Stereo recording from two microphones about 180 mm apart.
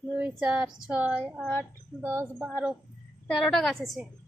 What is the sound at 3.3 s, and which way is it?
Speech, 5° left (ahead or behind).